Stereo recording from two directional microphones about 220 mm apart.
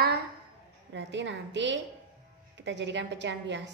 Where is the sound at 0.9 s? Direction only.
55° right (ahead or behind).